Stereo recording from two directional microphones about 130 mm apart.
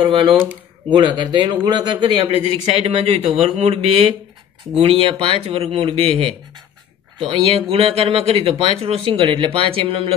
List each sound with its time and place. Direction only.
0.0 s speech: 35° right (ahead or behind)
2.7 s speech: 55° right (ahead or behind)